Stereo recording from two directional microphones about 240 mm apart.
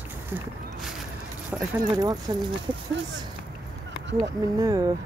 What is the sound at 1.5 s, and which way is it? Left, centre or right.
Keys jangling, centre.